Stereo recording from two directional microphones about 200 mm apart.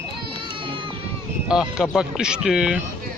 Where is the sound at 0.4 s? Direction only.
25° right (ahead or behind).